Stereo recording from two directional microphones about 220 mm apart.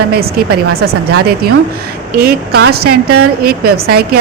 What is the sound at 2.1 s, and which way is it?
A woman's voice, 45° right (ahead or behind).